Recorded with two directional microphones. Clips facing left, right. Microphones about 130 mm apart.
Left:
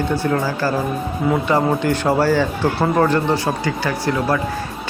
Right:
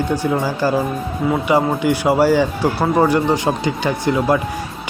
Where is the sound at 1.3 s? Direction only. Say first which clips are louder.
Right 1 dB; 5° right (ahead or behind).